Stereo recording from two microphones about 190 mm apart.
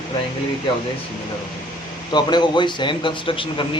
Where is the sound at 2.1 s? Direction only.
25° left (ahead or behind).